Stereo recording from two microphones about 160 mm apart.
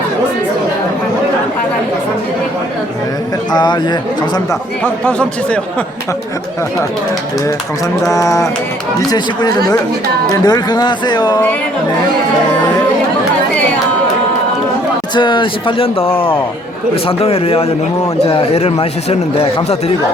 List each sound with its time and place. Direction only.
3.5 s speech: 25° left (ahead or behind)
4.8 s speech: 10° left (ahead or behind)
8.1 s speech: 20° left (ahead or behind)
15.1 s a man's voice: 30° left (ahead or behind)